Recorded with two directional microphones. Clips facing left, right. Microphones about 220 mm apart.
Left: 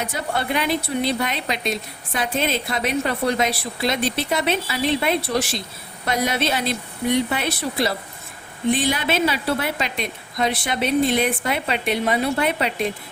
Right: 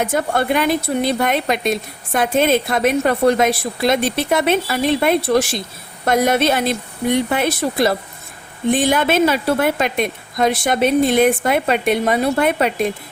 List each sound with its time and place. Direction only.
0.0 s a woman's voice: 50° right (ahead or behind)